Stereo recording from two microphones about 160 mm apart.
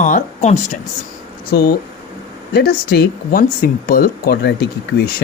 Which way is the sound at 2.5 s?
75° left (ahead or behind).